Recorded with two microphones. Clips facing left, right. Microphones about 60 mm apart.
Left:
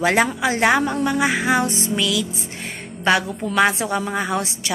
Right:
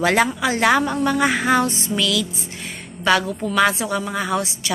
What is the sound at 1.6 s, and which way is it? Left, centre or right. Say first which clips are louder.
A woman's voice: even; left.